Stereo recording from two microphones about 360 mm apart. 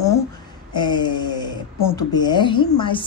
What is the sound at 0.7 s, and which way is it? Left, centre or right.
Speech, centre.